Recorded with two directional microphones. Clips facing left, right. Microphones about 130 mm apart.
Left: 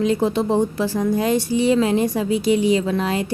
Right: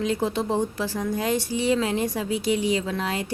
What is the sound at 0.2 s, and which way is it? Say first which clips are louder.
Speech: left 6 dB; 55° left (ahead or behind).